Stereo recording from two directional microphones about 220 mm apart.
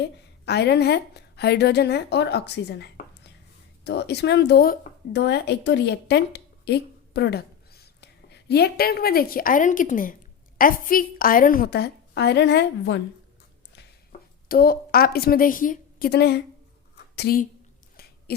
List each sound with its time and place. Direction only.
0.0 s a woman's voice: 50° left (ahead or behind)
14.4 s a woman's voice: 40° left (ahead or behind)
18.3 s owl: 45° left (ahead or behind)